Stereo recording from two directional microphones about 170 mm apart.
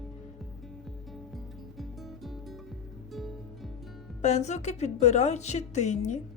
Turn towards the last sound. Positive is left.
turn(degrees=45)  # may be behind; listen again after turning